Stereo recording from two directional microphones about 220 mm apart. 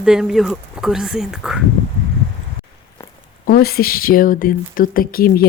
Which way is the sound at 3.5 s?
45° left (ahead or behind).